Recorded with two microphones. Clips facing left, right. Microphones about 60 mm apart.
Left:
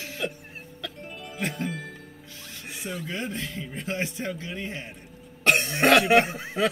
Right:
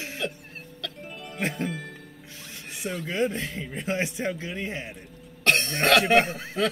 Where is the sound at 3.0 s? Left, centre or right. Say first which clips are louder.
Right 8 dB; right.